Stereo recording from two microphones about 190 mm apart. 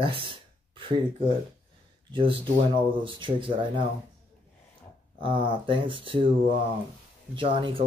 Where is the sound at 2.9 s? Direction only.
25° right (ahead or behind).